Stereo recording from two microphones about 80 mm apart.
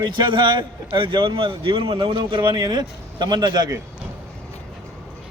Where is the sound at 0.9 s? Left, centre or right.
Right.